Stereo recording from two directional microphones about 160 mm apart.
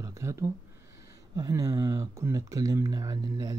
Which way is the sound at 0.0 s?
20° right (ahead or behind).